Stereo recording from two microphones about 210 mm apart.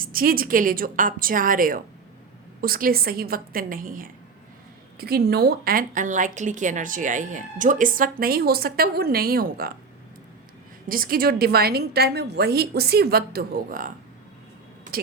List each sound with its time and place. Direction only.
0.0 s a woman's voice: 45° right (ahead or behind)
10.8 s a woman's voice: 45° right (ahead or behind)